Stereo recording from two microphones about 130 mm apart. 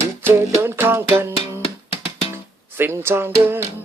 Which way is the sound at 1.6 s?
50° left (ahead or behind).